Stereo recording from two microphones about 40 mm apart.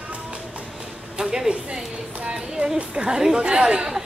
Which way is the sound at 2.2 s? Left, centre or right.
Right.